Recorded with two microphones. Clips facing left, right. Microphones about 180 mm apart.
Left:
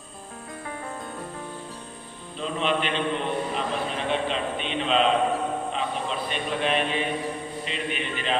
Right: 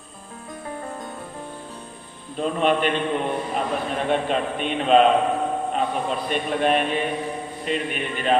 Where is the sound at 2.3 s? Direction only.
50° right (ahead or behind).